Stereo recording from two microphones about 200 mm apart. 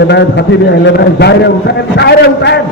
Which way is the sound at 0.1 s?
60° left (ahead or behind).